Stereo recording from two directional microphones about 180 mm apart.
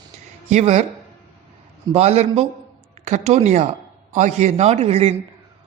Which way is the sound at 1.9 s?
35° right (ahead or behind).